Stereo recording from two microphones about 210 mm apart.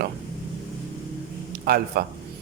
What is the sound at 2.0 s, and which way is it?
Speech, 50° right (ahead or behind).